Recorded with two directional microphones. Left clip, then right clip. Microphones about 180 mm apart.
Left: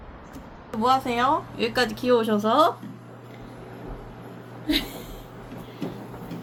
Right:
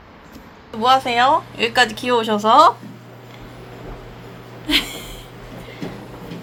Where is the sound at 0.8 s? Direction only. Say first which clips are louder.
Right 7 dB; centre (ahead or behind).